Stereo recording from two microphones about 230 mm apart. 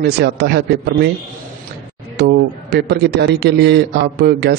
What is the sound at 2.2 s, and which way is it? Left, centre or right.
A man's voice, right.